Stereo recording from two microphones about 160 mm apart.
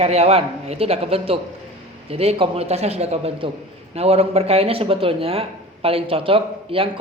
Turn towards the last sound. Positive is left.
turn(degrees=-35)  # may be behind; listen again after turning